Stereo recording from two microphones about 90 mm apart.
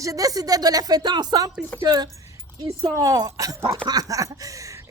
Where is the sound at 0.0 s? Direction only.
40° right (ahead or behind).